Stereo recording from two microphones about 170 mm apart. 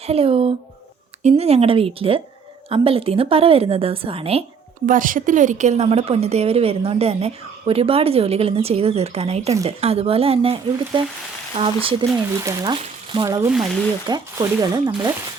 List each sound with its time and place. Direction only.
0.1 s a woman's voice: 35° right (ahead or behind)
4.9 s a woman's voice: 50° right (ahead or behind); by 12.0 s 30° right (ahead or behind)
13.1 s speech: 25° right (ahead or behind)
13.4 s speech: 5° right (ahead or behind)
14.1 s speech: 20° right (ahead or behind)